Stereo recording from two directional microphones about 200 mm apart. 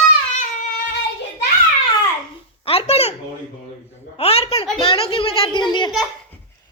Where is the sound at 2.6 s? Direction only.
30° left (ahead or behind).